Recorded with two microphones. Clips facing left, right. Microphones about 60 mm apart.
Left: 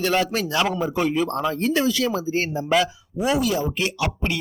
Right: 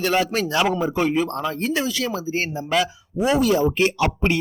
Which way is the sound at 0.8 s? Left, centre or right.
Right.